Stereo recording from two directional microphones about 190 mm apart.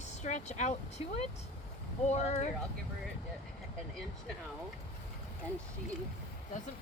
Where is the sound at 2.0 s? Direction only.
35° left (ahead or behind).